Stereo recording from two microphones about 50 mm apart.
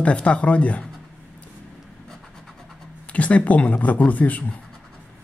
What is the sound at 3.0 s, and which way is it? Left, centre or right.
Speech, left.